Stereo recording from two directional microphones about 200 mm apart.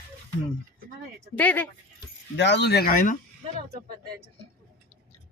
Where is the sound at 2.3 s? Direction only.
60° left (ahead or behind).